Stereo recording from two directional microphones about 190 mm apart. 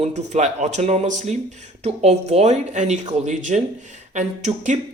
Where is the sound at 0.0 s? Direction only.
35° right (ahead or behind).